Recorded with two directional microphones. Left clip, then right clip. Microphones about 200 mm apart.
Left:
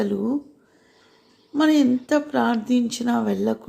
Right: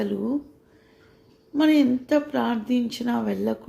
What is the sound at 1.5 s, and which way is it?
Speech, 10° left (ahead or behind).